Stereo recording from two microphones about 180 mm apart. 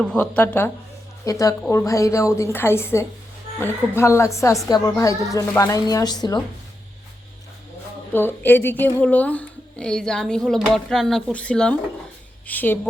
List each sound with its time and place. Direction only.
0.0 s a woman's voice: 5° left (ahead or behind); by 6.4 s 20° left (ahead or behind)
8.1 s a woman's voice: 10° left (ahead or behind)